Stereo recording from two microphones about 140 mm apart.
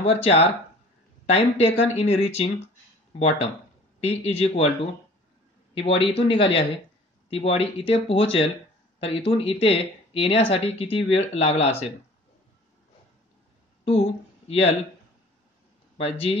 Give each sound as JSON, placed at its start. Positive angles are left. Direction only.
{"t": 0.0, "sound": "speech", "side_deg": 45}
{"t": 5.8, "sound": "speech", "side_deg": 45}
{"t": 13.8, "sound": "a sound", "side_deg": 45}
{"t": 16.0, "sound": "speech", "side_deg": 45}